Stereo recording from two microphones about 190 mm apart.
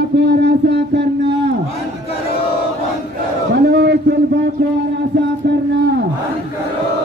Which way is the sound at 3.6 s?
65° right (ahead or behind).